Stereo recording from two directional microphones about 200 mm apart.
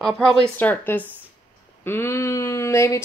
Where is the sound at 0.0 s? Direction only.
Centre (ahead or behind).